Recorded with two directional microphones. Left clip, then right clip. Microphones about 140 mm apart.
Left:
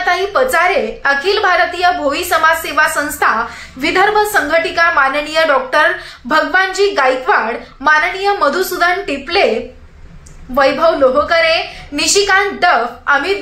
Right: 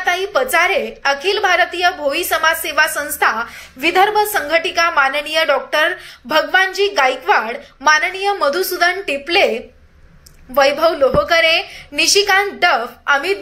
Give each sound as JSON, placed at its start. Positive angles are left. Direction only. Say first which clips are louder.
{"t": 0.0, "sound": "a woman's voice", "louder": "left 3 dB", "side_deg": -10}
{"t": 10.5, "sound": "a woman's voice", "louder": "left 2 dB", "side_deg": -20}